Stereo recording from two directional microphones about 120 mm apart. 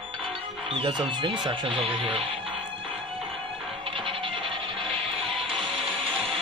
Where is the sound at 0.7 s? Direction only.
40° right (ahead or behind).